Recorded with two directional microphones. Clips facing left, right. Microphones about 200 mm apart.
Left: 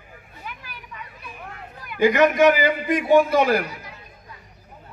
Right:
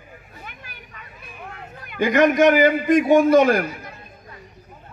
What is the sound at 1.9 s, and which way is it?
A man's voice, 50° right (ahead or behind).